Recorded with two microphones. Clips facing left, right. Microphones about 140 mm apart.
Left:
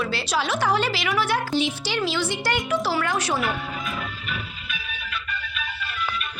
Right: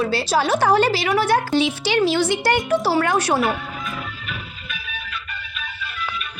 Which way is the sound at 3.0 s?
60° right (ahead or behind).